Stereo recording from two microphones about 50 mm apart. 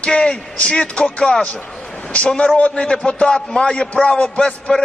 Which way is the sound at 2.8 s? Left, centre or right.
Left.